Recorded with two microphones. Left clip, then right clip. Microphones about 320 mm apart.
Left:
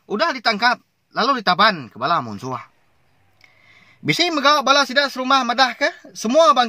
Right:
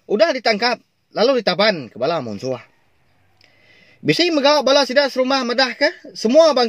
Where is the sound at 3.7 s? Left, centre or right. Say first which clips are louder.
Right 2 dB; left.